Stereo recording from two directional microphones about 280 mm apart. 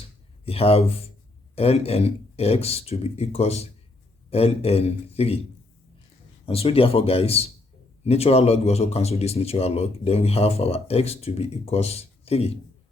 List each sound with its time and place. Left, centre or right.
0.4 s speech: left
6.4 s speech: left